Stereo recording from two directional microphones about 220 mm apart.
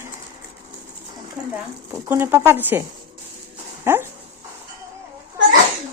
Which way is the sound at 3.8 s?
10° right (ahead or behind).